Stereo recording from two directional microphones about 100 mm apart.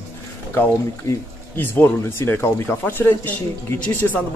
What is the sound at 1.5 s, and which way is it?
Speech, 20° left (ahead or behind).